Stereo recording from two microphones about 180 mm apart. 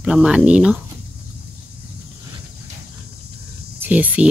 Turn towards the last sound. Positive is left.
turn(degrees=-10)  # may be behind; listen again after turning